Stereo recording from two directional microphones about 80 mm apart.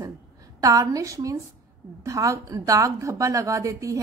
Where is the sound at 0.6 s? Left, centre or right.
Right.